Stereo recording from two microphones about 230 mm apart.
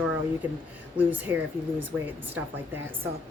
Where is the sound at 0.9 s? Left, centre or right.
Centre.